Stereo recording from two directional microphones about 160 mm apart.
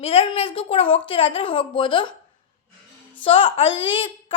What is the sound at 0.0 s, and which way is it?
A woman's voice, 35° left (ahead or behind).